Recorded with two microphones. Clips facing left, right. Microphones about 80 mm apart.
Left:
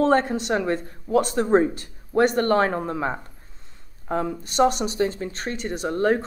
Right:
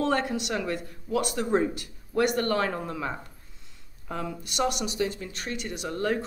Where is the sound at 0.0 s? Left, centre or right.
Left.